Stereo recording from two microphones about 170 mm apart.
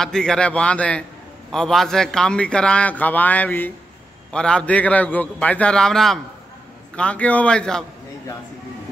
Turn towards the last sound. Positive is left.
turn(degrees=5)  # may be behind; listen again after turning